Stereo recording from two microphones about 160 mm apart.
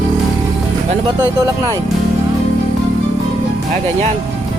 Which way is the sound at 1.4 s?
20° right (ahead or behind).